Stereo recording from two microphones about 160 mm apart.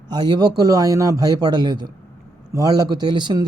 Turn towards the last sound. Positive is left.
turn(degrees=-25)  # may be behind; listen again after turning